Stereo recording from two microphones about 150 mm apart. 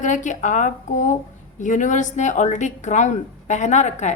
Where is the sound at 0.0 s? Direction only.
55° left (ahead or behind).